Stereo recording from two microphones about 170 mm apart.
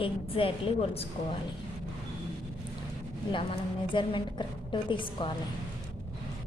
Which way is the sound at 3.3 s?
30° left (ahead or behind).